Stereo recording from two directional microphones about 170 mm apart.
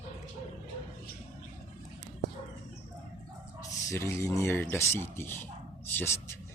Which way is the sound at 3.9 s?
15° left (ahead or behind).